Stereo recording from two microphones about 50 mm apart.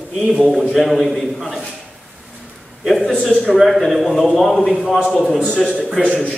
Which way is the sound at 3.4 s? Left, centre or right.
Centre.